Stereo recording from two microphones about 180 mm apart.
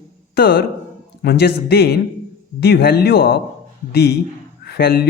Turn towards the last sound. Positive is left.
turn(degrees=60)  # may be behind; listen again after turning